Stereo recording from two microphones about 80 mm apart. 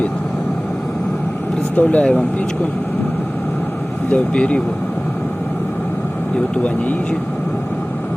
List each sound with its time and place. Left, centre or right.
1.7 s speech: centre
4.1 s speech: centre